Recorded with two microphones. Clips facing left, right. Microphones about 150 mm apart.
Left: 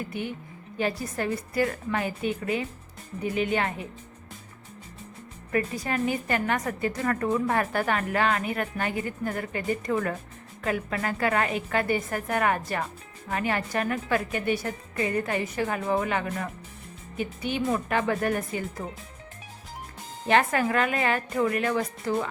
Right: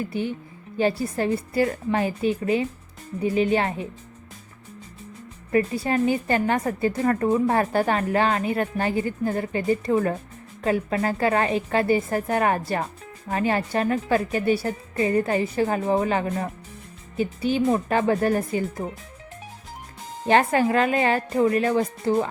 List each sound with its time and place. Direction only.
0.1 s a woman's voice: 30° right (ahead or behind)
5.5 s a woman's voice: 30° right (ahead or behind)
20.2 s a woman's voice: 30° right (ahead or behind)